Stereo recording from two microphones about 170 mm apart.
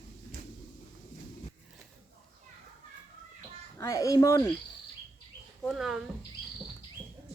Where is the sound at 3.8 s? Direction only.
20° left (ahead or behind).